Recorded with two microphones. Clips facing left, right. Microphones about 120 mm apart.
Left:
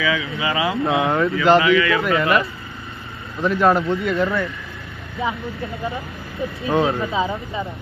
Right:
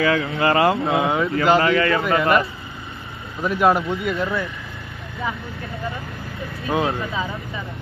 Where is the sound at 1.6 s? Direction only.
45° right (ahead or behind).